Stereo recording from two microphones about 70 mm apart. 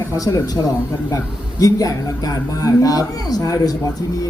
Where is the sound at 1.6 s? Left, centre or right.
Left.